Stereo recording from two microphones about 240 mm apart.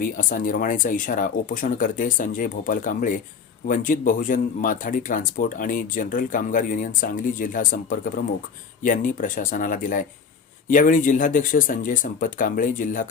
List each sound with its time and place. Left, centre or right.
0.0 s speech: left